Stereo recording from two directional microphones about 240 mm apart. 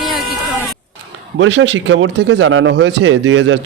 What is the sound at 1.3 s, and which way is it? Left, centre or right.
Speech, right.